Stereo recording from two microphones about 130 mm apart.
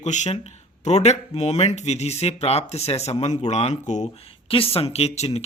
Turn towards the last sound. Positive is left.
turn(degrees=55)  # may be behind; listen again after turning